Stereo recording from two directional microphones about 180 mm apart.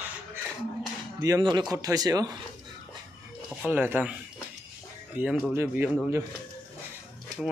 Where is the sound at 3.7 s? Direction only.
10° right (ahead or behind).